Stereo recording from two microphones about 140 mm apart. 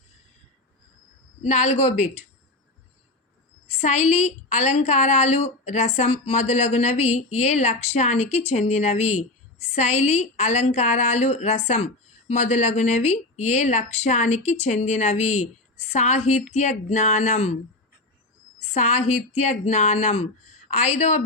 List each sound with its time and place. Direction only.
1.4 s a woman's voice: 55° left (ahead or behind)
3.7 s a woman's voice: 50° left (ahead or behind)
18.6 s a woman's voice: 55° left (ahead or behind)